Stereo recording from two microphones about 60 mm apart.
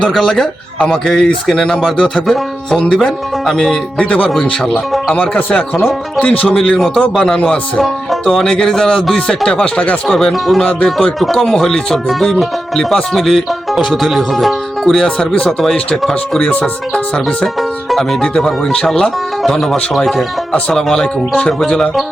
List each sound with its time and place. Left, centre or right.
0.2 s speech: centre
6.7 s speech: centre
10.1 s speech: centre
10.6 s speech: centre
10.8 s speech: centre
20.5 s speech: centre